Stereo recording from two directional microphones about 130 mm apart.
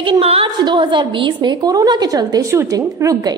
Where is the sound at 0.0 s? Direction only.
45° right (ahead or behind).